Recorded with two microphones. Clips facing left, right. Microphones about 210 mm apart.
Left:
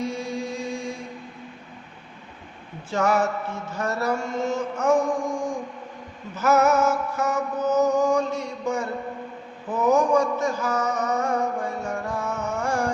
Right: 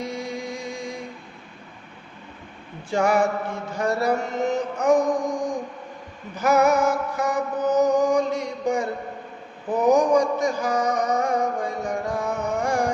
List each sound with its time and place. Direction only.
0.0 s music: 15° right (ahead or behind)
2.9 s music: 15° right (ahead or behind)
6.3 s mantra: 15° right (ahead or behind)
9.6 s a sound: 15° right (ahead or behind)
12.5 s carnatic music: 15° right (ahead or behind)